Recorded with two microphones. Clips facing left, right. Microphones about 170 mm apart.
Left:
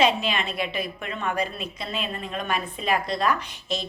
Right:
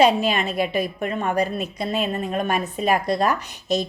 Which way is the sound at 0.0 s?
40° right (ahead or behind).